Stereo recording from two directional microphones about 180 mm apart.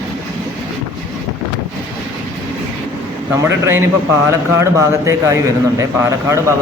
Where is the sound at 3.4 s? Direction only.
15° right (ahead or behind).